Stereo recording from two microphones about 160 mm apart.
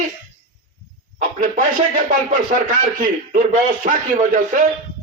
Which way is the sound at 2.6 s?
55° right (ahead or behind).